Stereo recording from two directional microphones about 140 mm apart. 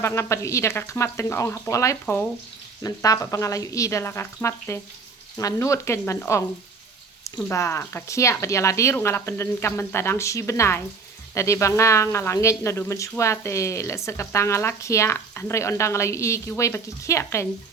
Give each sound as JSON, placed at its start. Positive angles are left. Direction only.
{"t": 0.0, "sound": "speech", "side_deg": 20}